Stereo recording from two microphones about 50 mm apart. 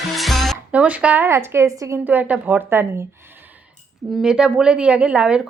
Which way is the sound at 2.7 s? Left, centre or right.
Right.